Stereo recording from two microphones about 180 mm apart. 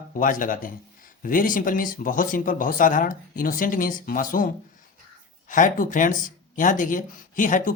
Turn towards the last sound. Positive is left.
turn(degrees=45)  # may be behind; listen again after turning